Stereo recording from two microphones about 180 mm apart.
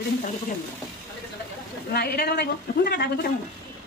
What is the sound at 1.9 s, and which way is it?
A woman's voice, 60° left (ahead or behind).